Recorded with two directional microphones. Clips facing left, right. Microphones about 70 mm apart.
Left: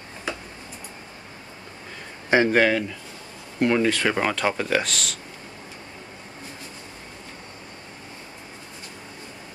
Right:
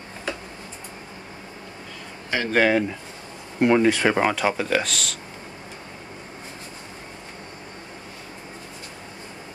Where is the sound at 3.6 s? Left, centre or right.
Centre.